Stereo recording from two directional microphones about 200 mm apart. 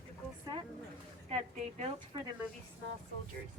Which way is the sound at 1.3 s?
35° right (ahead or behind).